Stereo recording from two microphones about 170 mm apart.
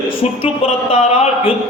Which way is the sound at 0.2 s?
35° left (ahead or behind).